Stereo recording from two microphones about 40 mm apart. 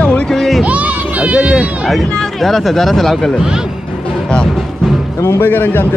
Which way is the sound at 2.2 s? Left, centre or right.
Centre.